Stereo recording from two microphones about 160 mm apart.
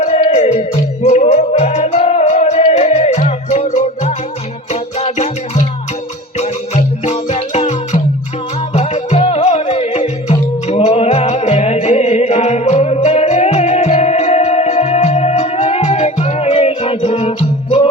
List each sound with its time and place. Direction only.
0.0 s music: 40° left (ahead or behind)